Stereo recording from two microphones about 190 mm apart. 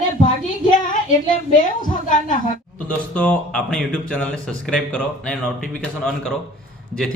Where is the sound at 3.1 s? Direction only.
5° left (ahead or behind).